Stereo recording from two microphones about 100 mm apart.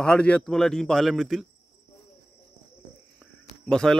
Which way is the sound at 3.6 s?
5° left (ahead or behind).